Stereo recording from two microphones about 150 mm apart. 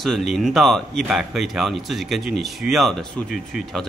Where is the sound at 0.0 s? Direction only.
Centre (ahead or behind).